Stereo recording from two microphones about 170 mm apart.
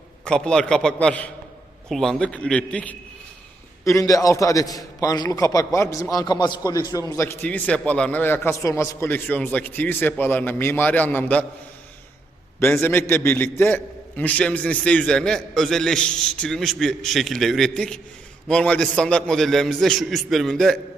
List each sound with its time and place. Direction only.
0.3 s a man's voice: 5° left (ahead or behind)
3.8 s a man's voice: 20° left (ahead or behind)
12.5 s a man's voice: 15° left (ahead or behind)